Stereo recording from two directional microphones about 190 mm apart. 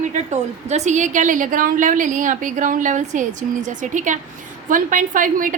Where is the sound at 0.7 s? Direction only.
40° right (ahead or behind).